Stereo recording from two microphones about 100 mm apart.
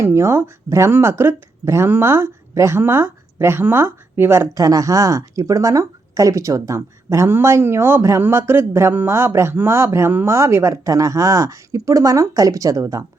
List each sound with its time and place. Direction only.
0.0 s speech: 25° right (ahead or behind)